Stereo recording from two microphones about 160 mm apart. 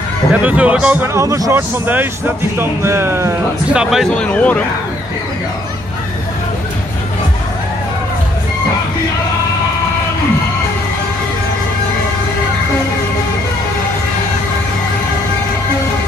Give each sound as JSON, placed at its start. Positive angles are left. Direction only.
{"t": 0.3, "sound": "a man's voice", "side_deg": -10}
{"t": 3.7, "sound": "a man's voice", "side_deg": -5}